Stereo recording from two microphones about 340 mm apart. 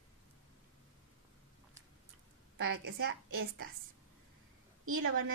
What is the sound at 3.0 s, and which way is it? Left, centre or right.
Speech, right.